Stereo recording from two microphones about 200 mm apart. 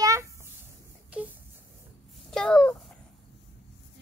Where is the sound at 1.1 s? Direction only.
5° right (ahead or behind).